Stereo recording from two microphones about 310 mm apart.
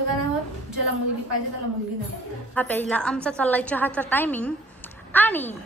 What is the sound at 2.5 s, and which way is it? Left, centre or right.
A woman's voice, centre.